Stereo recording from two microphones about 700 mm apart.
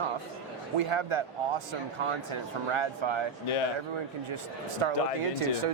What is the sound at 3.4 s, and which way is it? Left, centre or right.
Speech, left.